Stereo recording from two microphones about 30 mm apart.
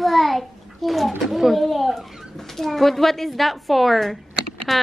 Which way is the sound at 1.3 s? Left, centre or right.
Centre.